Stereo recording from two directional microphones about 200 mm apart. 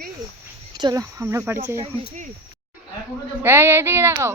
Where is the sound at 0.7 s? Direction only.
20° right (ahead or behind).